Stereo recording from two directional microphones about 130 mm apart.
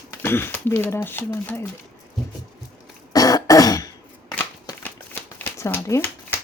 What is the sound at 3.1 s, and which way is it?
Throat clearing, 30° left (ahead or behind).